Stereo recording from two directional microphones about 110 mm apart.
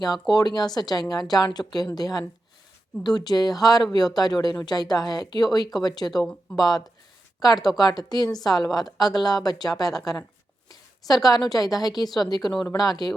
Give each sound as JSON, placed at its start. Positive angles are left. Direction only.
{"t": 0.3, "sound": "a woman's voice", "side_deg": 40}